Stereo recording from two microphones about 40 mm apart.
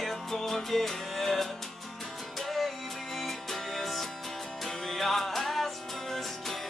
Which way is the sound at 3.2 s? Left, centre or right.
Centre.